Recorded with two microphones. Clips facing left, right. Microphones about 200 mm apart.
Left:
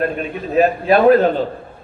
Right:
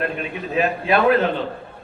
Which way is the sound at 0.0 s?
40° left (ahead or behind).